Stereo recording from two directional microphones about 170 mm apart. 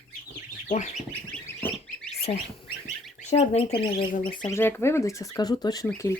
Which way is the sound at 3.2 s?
40° left (ahead or behind).